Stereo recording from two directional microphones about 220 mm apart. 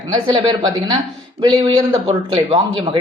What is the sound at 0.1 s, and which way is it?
Speech, 20° right (ahead or behind).